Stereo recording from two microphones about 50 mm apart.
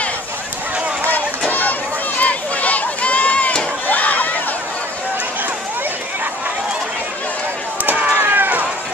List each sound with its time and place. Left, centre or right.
1.5 s a sound: left
3.8 s crowd: left
7.8 s run: right